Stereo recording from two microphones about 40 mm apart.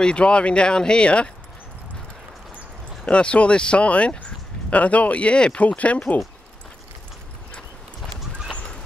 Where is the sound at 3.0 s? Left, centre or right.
Left.